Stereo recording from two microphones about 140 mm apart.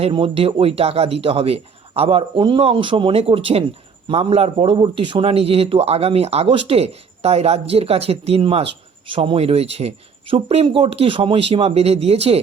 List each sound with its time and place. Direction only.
0.0 s a man's voice: 40° right (ahead or behind)